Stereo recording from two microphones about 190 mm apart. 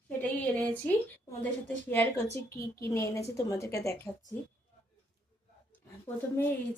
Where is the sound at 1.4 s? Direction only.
10° left (ahead or behind).